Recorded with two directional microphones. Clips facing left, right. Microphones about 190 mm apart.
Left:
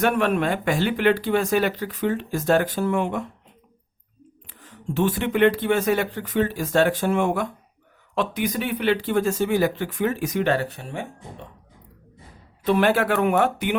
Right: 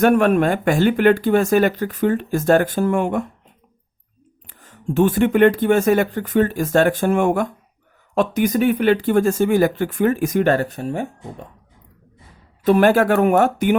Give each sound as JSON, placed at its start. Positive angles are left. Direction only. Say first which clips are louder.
{"t": 0.0, "sound": "speech", "louder": "right 6 dB", "side_deg": -45}
{"t": 4.4, "sound": "speech", "louder": "right 5 dB", "side_deg": -45}
{"t": 12.6, "sound": "speech", "louder": "right 5 dB", "side_deg": -45}